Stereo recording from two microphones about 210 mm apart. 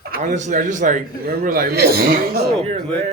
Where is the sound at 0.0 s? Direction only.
40° right (ahead or behind).